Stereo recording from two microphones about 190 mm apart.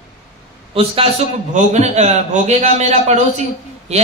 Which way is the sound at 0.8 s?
30° right (ahead or behind).